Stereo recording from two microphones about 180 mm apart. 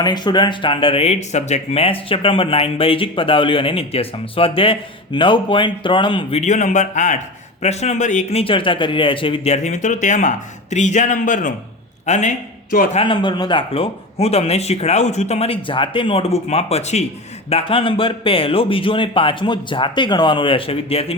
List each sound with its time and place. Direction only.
0.0 s speech: 25° left (ahead or behind)
6.4 s a man's voice: 40° left (ahead or behind)
12.7 s a man's voice: 50° left (ahead or behind)
13.0 s speech: 25° left (ahead or behind)